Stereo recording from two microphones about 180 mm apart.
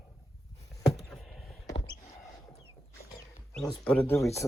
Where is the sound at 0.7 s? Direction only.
Centre (ahead or behind).